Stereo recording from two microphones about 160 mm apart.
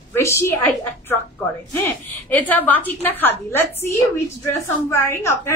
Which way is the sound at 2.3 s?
10° left (ahead or behind).